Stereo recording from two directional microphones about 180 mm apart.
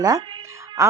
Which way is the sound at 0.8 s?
15° right (ahead or behind).